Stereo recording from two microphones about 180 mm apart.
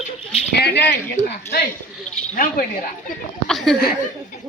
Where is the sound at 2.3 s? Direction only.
50° left (ahead or behind).